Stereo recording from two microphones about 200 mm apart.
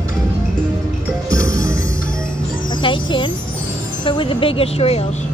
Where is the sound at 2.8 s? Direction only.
25° left (ahead or behind).